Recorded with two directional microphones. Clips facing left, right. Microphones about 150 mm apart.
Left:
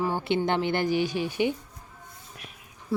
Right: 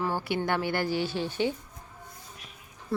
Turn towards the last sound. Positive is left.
turn(degrees=0)  # may be behind; listen again after turning